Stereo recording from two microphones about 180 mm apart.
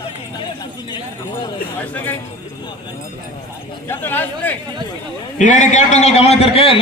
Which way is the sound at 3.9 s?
10° left (ahead or behind).